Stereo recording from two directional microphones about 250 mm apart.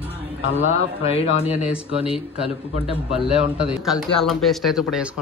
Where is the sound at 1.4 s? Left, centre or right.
Left.